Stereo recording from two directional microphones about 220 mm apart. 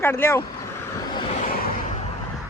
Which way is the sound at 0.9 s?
20° left (ahead or behind).